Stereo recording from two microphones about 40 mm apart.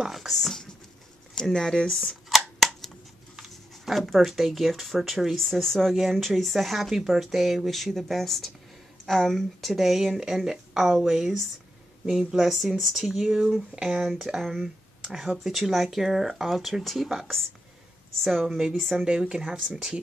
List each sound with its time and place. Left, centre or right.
0.3 s speech: centre
1.3 s speech: centre
2.2 s a sound: centre
3.3 s speech: centre
9.7 s speech: centre
19.0 s speech: right